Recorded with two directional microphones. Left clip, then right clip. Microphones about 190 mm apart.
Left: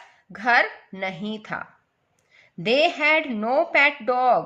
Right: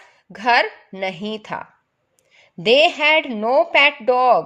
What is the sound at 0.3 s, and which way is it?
A woman's voice, 35° right (ahead or behind).